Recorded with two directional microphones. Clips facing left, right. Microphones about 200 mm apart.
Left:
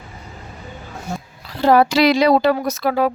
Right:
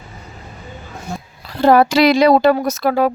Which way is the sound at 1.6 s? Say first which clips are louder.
Right 2 dB; 55° right (ahead or behind).